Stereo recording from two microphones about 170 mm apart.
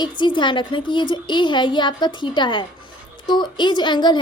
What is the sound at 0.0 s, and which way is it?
A woman's voice, 25° left (ahead or behind).